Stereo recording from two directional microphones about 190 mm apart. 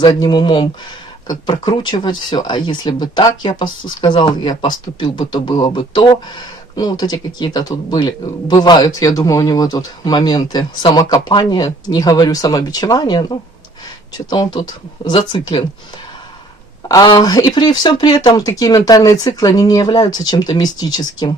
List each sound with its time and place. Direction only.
0.0 s speech: 20° left (ahead or behind)
16.9 s speech: 20° left (ahead or behind)